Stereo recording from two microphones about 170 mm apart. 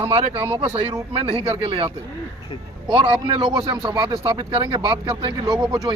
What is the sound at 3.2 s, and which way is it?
Speech, 30° right (ahead or behind).